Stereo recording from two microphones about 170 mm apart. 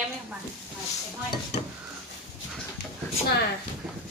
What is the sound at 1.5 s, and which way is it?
Stir, 40° left (ahead or behind).